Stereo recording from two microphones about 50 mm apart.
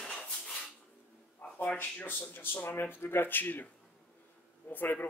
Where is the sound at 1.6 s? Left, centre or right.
Left.